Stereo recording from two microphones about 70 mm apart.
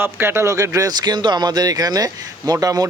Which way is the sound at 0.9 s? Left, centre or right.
Right.